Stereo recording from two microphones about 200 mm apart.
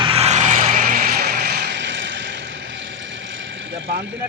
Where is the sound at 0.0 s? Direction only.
30° right (ahead or behind); by 2.4 s 65° right (ahead or behind).